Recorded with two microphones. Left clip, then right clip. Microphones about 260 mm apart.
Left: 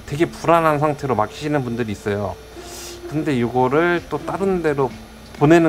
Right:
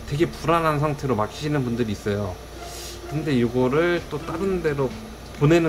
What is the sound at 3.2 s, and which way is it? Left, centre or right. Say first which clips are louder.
Speech: left 3 dB; centre.